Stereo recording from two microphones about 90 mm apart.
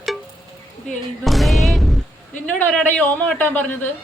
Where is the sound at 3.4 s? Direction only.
20° left (ahead or behind).